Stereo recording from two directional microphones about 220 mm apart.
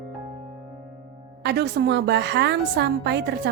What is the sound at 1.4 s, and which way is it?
A woman's voice, 50° right (ahead or behind).